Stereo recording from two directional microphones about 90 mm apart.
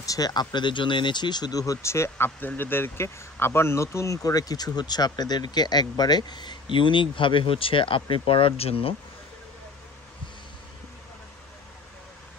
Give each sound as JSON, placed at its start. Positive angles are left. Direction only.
{"t": 0.0, "sound": "speech", "side_deg": 40}